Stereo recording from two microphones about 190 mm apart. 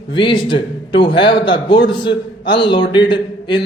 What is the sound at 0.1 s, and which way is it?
A man's voice, 25° left (ahead or behind).